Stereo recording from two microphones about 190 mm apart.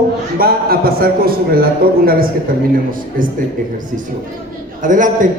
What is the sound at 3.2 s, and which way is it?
Speech, 45° right (ahead or behind).